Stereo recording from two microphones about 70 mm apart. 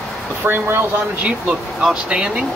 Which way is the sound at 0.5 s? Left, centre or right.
Right.